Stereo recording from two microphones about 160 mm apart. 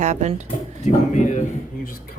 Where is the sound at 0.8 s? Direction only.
50° left (ahead or behind).